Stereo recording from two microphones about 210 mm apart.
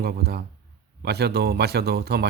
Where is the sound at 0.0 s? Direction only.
50° right (ahead or behind).